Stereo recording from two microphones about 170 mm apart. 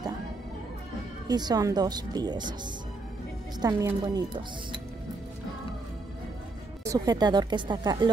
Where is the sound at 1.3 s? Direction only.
25° right (ahead or behind).